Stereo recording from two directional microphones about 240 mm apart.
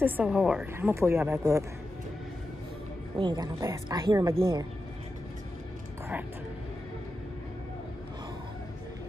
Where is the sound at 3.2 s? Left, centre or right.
Centre.